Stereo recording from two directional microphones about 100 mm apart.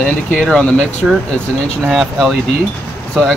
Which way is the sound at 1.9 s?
Centre (ahead or behind).